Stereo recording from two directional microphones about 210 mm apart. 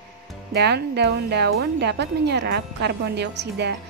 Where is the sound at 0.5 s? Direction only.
50° right (ahead or behind).